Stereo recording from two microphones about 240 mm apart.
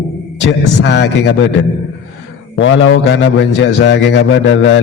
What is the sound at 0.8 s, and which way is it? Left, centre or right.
Speech, left.